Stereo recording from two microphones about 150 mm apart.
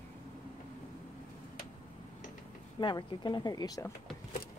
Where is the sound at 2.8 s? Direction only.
30° left (ahead or behind).